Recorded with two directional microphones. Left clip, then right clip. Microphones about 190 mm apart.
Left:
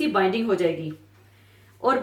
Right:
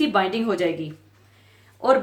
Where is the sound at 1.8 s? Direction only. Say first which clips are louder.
Right 4 dB; 50° right (ahead or behind).